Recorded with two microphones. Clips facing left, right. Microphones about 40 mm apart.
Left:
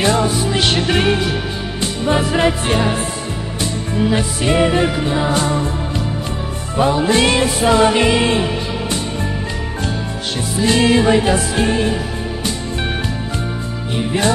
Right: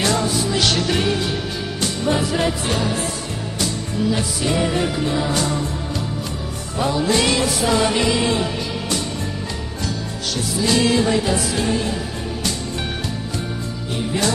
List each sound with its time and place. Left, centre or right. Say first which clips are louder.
0.0 s music: left 4 dB; left
6.7 s music: left 4 dB; left
10.6 s music: left 4 dB; left
13.9 s music: left 4 dB; left